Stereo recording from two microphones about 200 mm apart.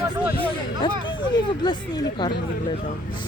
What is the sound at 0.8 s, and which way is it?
Speech, 25° left (ahead or behind).